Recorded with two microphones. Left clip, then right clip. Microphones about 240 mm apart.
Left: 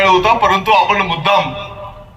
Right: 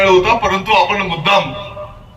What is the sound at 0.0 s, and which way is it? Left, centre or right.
Speech, left.